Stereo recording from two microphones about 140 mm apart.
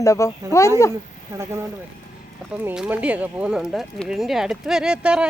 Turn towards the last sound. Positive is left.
turn(degrees=-5)  # may be behind; listen again after turning